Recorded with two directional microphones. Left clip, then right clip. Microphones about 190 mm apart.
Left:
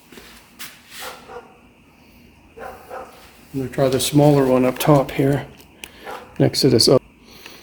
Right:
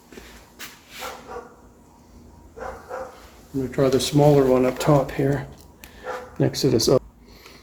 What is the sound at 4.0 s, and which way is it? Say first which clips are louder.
Speech: left 1 dB; 55° left (ahead or behind).